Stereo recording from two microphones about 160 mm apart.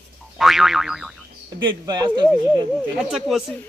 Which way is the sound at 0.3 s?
Centre (ahead or behind).